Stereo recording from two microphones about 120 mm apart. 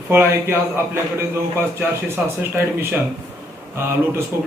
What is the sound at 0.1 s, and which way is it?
Speech, 20° right (ahead or behind).